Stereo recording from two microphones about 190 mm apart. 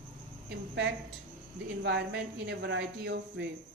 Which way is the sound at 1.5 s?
65° right (ahead or behind).